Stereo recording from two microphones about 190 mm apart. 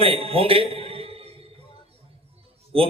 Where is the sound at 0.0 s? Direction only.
30° right (ahead or behind).